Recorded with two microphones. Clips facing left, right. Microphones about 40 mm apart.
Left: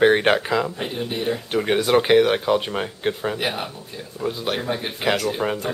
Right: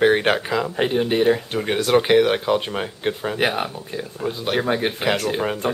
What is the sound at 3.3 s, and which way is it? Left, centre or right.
Speech, right.